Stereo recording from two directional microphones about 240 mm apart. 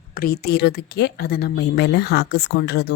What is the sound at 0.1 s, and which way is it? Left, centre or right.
A woman's voice, left.